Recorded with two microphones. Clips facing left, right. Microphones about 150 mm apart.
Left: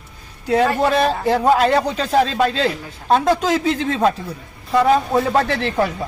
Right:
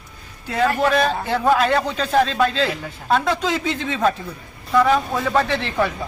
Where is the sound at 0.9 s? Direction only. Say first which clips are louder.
Left 2 dB; 30° left (ahead or behind).